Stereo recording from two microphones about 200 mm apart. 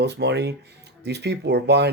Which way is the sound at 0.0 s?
55° right (ahead or behind).